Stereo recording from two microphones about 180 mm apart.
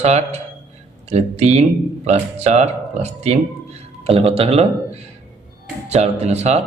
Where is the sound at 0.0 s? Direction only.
40° right (ahead or behind).